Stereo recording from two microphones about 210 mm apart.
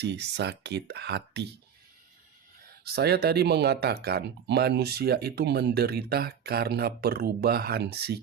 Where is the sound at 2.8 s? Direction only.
50° right (ahead or behind).